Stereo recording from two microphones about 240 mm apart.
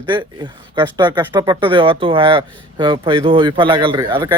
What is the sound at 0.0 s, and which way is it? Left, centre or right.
A man's voice, centre.